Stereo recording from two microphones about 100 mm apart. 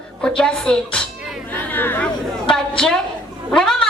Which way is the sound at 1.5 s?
20° left (ahead or behind).